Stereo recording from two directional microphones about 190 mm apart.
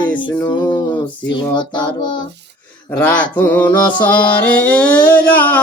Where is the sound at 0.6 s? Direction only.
25° left (ahead or behind).